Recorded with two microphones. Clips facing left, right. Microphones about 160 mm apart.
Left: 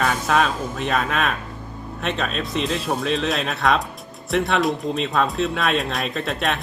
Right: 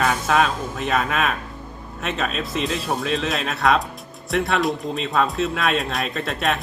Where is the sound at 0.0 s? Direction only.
Centre (ahead or behind).